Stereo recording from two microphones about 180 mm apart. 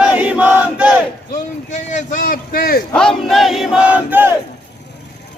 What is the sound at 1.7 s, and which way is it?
Speech, 40° left (ahead or behind).